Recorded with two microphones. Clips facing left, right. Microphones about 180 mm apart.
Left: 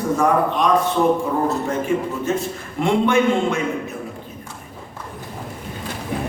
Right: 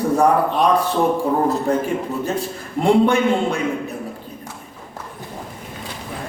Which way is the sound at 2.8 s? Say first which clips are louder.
Right 2 dB; 35° right (ahead or behind).